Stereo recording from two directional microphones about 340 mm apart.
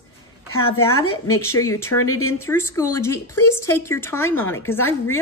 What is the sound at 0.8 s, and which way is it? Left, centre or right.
A woman's voice, centre.